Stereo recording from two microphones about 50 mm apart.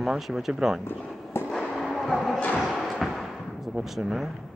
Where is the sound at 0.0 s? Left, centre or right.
Centre.